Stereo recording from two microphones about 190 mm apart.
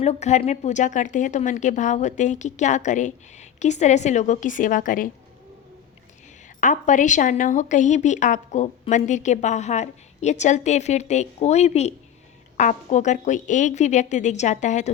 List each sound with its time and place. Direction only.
0.0 s a woman's voice: 35° left (ahead or behind)
6.6 s a woman's voice: 40° left (ahead or behind)